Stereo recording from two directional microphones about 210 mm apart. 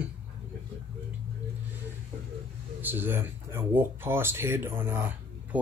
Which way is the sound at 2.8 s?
10° right (ahead or behind).